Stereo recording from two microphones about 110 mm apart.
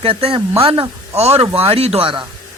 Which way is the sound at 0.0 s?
60° right (ahead or behind).